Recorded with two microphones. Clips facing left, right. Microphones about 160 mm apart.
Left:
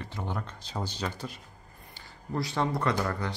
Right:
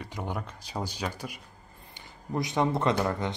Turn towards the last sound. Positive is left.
turn(degrees=-20)  # may be behind; listen again after turning